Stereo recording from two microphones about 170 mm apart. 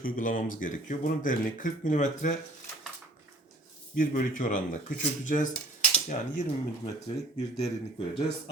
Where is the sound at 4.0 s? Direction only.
50° left (ahead or behind).